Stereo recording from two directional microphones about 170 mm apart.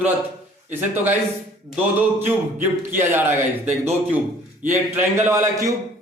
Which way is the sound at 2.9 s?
10° right (ahead or behind).